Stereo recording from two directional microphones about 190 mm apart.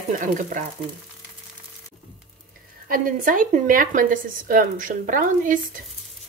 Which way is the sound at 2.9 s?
45° right (ahead or behind).